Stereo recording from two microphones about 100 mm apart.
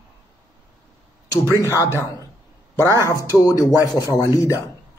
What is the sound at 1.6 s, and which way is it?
Speech, 30° left (ahead or behind).